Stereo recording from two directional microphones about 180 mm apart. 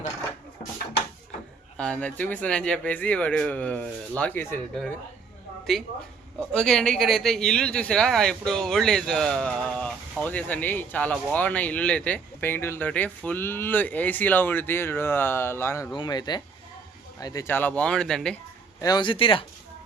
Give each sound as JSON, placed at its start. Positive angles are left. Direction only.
{"t": 1.8, "sound": "speech", "side_deg": 5}
{"t": 18.8, "sound": "speech", "side_deg": 25}